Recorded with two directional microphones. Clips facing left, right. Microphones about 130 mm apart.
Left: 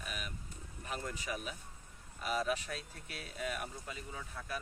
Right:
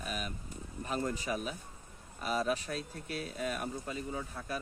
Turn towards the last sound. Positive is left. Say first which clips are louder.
# right 5 dB
turn(degrees=-35)  # may be behind; listen again after turning